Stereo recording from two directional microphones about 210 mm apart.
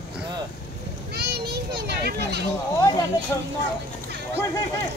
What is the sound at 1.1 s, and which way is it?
Children playing, 50° right (ahead or behind).